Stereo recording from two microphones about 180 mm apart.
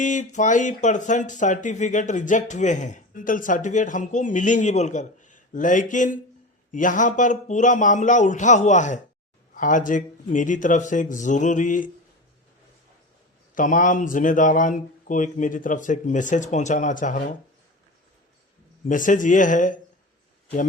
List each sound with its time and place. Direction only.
0.0 s speech: 45° left (ahead or behind)
13.6 s speech: 45° left (ahead or behind)
18.9 s speech: 45° left (ahead or behind)